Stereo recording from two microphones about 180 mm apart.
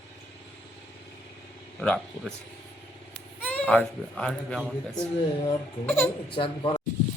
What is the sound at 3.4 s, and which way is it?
A man's voice, 10° left (ahead or behind).